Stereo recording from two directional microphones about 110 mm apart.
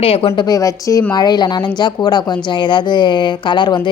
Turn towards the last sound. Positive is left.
turn(degrees=45)  # may be behind; listen again after turning